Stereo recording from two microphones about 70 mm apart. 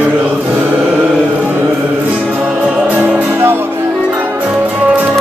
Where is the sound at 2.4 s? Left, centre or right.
Centre.